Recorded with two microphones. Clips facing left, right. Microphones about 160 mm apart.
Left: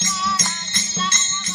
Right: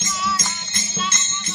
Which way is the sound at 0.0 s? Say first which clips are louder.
Even; centre (ahead or behind).